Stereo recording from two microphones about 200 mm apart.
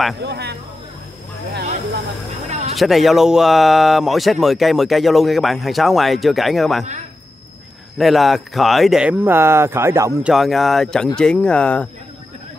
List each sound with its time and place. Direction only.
0.2 s speech: 55° right (ahead or behind)
2.7 s a man's voice: centre (ahead or behind)
8.0 s speech: centre (ahead or behind)
10.3 s a man's voice: centre (ahead or behind)